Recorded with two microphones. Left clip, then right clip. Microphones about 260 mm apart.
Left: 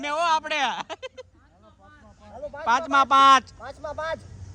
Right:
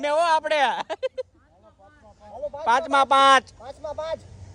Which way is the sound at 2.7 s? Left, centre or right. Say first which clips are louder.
Right 1 dB; centre.